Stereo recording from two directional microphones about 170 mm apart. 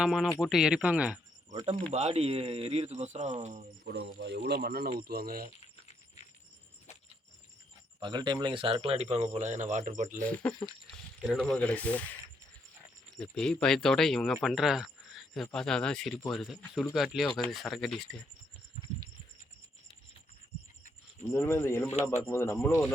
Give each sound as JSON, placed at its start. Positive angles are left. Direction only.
{"t": 0.0, "sound": "speech", "side_deg": -5}
{"t": 1.5, "sound": "a man's voice", "side_deg": -40}
{"t": 3.8, "sound": "speech", "side_deg": -80}
{"t": 8.0, "sound": "a man's voice", "side_deg": -25}
{"t": 10.2, "sound": "speech", "side_deg": 10}
{"t": 13.1, "sound": "speech", "side_deg": 5}
{"t": 21.2, "sound": "speech", "side_deg": 15}